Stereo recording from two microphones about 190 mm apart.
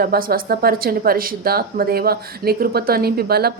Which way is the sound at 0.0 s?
50° right (ahead or behind).